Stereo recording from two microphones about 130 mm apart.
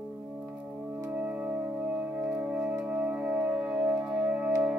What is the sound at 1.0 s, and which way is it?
Music, 10° right (ahead or behind).